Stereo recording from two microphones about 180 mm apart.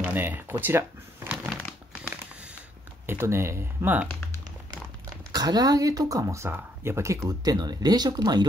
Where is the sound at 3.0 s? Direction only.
15° right (ahead or behind).